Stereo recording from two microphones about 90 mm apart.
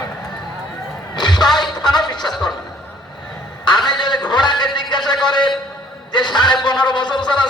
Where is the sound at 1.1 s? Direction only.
55° left (ahead or behind).